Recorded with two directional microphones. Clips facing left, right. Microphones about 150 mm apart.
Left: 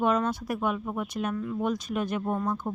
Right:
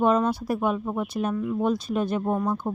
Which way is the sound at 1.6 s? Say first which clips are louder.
Right 4 dB; 30° right (ahead or behind).